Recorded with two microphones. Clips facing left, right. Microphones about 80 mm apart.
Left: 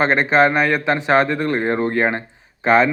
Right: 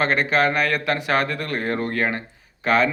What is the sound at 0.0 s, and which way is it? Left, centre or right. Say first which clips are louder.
A man's voice: left 5 dB; left.